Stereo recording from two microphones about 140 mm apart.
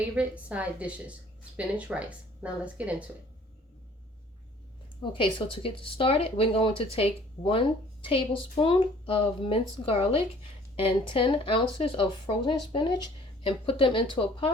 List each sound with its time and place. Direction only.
0.2 s speech: 10° right (ahead or behind)
5.1 s speech: 35° left (ahead or behind)